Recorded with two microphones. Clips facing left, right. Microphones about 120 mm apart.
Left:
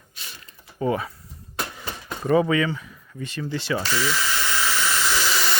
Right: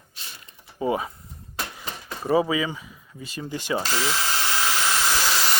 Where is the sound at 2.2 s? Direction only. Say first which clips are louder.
Left 2 dB; 10° right (ahead or behind).